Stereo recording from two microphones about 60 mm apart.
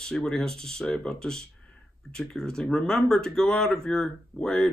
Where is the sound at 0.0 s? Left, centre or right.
Centre.